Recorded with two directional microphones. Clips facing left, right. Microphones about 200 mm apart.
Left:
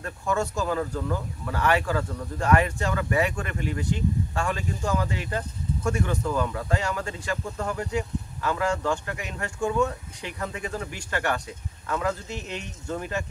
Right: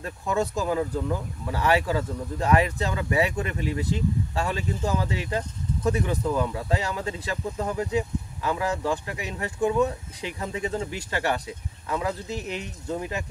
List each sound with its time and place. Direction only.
0.0 s speech: 15° right (ahead or behind)